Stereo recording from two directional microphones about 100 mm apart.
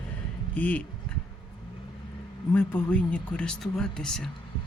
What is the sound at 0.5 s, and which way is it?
Speech, 15° left (ahead or behind).